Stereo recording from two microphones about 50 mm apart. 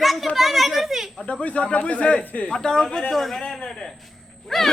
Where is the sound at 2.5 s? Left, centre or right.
Centre.